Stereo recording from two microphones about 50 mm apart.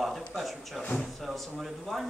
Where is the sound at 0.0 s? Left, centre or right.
Centre.